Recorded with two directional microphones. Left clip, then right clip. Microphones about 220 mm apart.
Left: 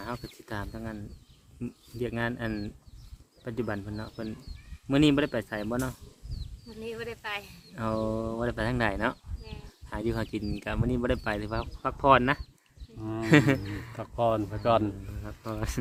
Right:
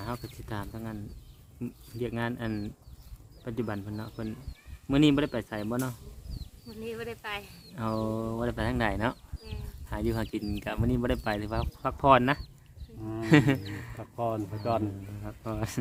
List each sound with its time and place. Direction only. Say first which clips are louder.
0.0 s speech: even; 5° right (ahead or behind)
13.0 s speech: left 2 dB; 45° left (ahead or behind)
13.2 s speech: left 1 dB; centre (ahead or behind)
13.9 s speech: left 5 dB; 45° left (ahead or behind)
15.2 s speech: right 1 dB; 5° right (ahead or behind)